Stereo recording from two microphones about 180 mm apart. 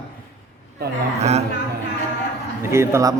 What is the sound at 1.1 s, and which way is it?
Speech, 40° right (ahead or behind).